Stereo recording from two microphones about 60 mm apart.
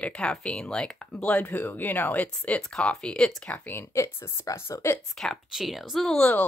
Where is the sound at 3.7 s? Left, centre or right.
Left.